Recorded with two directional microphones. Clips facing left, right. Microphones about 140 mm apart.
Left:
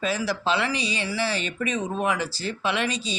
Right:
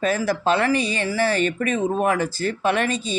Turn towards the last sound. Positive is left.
turn(degrees=-50)  # may be behind; listen again after turning